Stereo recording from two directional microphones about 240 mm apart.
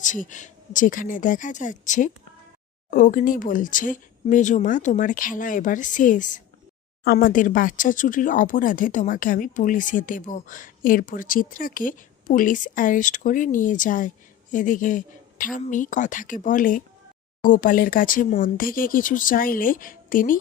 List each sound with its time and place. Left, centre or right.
0.0 s speech: left